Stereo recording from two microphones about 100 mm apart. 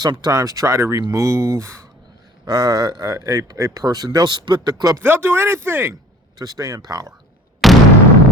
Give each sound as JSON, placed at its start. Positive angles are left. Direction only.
{"t": 0.0, "sound": "speech", "side_deg": -40}
{"t": 2.5, "sound": "speech", "side_deg": -40}
{"t": 5.0, "sound": "speech", "side_deg": -20}
{"t": 6.4, "sound": "speech", "side_deg": -35}
{"t": 7.6, "sound": "a sound", "side_deg": 0}